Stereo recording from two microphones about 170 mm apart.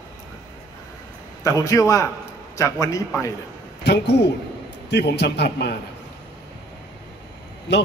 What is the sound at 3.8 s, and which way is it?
A man's voice, 90° left.